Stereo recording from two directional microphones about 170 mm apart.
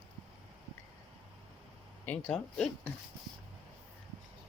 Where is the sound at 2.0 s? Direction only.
5° left (ahead or behind).